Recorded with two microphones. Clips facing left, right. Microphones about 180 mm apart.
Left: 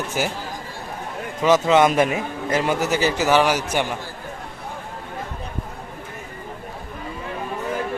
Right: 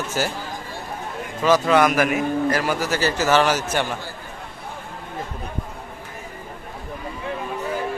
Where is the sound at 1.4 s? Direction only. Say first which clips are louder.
Left 1 dB; 20° left (ahead or behind).